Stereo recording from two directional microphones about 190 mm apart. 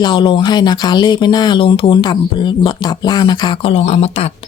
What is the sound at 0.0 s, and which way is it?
A woman's voice, 25° left (ahead or behind).